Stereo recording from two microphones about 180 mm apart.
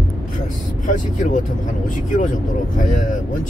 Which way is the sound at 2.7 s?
45° left (ahead or behind).